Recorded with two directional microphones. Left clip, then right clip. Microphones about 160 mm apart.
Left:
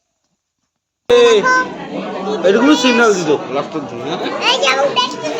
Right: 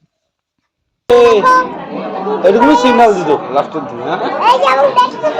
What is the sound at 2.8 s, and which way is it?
Speech, 5° right (ahead or behind).